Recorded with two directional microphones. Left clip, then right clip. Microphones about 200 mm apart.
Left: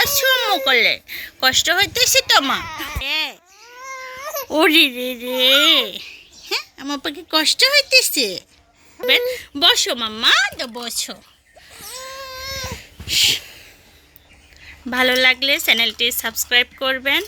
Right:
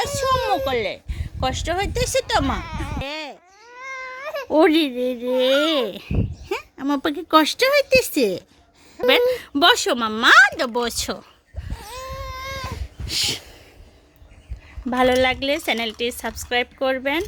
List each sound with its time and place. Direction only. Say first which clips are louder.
0.0 s speech: left 4 dB; 10° right (ahead or behind)
3.8 s crying: even; 20° right (ahead or behind)
4.5 s speech: left 3 dB; 20° right (ahead or behind); by 11.2 s 55° right (ahead or behind)
11.7 s baby cry: even; 35° right (ahead or behind)
12.5 s babbling: left 3 dB; 25° right (ahead or behind)
14.8 s speech: left 3 dB; 20° right (ahead or behind)